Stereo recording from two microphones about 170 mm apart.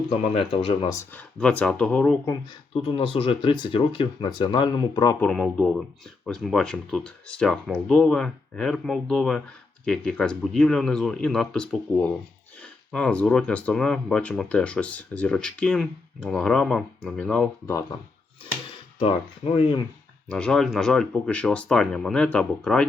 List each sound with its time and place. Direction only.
0.1 s speech: 30° left (ahead or behind)
1.1 s speech: 5° left (ahead or behind)
2.7 s speech: 30° left (ahead or behind)
5.2 s speech: 5° left (ahead or behind)
19.5 s speech: 30° left (ahead or behind)
20.2 s speech: 5° left (ahead or behind)